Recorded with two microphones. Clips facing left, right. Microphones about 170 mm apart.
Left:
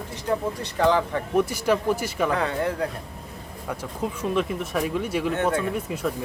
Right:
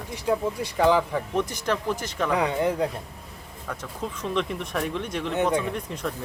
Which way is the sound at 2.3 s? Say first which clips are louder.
Right 2 dB; 15° right (ahead or behind).